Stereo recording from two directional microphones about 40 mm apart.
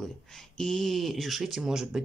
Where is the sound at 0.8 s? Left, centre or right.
Centre.